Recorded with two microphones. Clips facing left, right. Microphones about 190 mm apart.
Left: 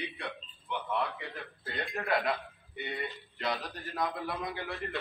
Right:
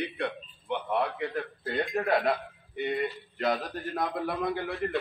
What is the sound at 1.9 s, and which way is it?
Speech, 40° right (ahead or behind).